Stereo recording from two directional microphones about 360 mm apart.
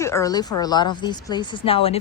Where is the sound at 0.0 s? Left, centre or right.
Centre.